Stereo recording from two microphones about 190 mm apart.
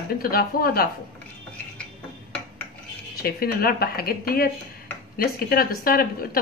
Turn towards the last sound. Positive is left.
turn(degrees=50)  # may be behind; listen again after turning